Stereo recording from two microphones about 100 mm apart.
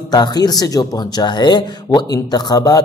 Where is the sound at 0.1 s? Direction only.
40° left (ahead or behind).